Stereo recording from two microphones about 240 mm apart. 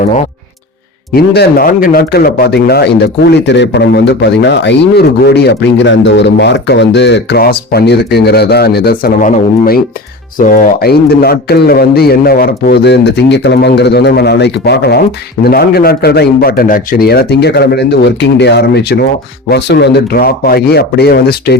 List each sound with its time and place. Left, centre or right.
1.1 s a man's voice: left